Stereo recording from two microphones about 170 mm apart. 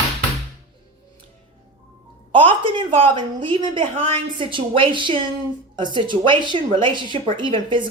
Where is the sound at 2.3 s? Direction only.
30° right (ahead or behind).